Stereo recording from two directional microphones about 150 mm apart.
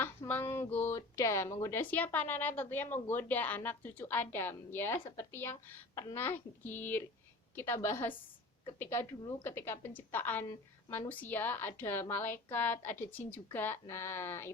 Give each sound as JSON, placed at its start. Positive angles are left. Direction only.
{"t": 0.0, "sound": "a woman's voice", "side_deg": 15}